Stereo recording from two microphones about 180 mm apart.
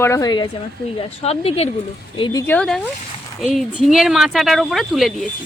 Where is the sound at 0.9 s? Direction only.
35° left (ahead or behind).